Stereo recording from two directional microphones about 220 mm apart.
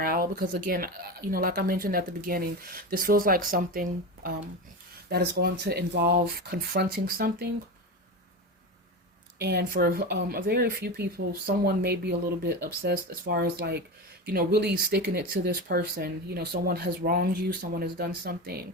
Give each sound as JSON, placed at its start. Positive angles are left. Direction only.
{"t": 0.0, "sound": "speech", "side_deg": -40}
{"t": 9.4, "sound": "speech", "side_deg": -45}